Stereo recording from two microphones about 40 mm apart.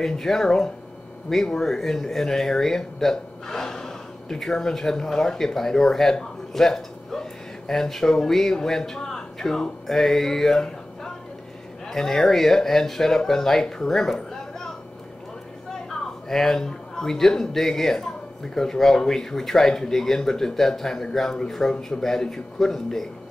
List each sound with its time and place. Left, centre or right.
0.0 s a man's voice: centre
15.9 s a man's voice: centre